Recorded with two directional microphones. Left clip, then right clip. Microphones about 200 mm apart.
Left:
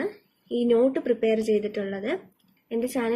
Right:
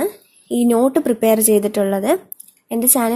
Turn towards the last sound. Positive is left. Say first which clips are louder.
# right 8 dB
turn(degrees=-45)  # may be behind; listen again after turning